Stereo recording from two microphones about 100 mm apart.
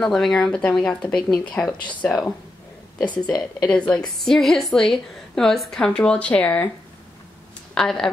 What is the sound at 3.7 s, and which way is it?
Speech, 10° left (ahead or behind).